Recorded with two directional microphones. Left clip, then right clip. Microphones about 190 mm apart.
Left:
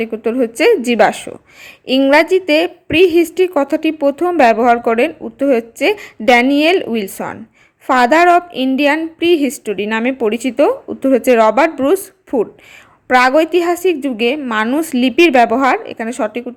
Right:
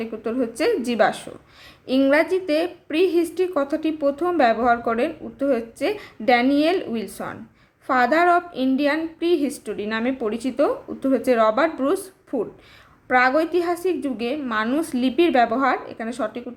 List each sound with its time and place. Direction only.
0.0 s a woman's voice: 30° left (ahead or behind)